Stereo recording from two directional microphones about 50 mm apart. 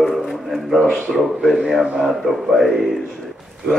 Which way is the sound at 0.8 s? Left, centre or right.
Left.